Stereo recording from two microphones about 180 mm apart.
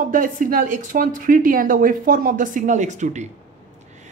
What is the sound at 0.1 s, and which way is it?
Speech, 50° right (ahead or behind).